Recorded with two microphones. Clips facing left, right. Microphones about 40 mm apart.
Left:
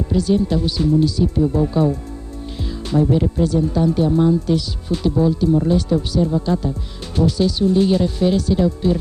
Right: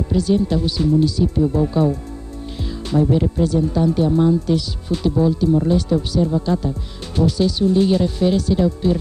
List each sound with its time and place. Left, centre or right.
0.1 s speech: centre